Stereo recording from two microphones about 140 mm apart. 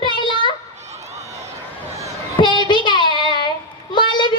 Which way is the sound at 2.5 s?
35° left (ahead or behind).